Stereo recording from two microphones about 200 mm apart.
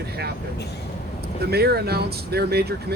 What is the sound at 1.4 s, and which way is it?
Speech, 50° right (ahead or behind).